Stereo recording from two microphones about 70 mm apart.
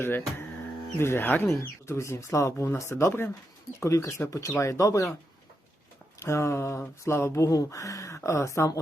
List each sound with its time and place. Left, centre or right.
0.0 s speech: left
6.1 s speech: left